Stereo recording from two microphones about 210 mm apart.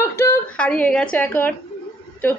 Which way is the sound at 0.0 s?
10° left (ahead or behind).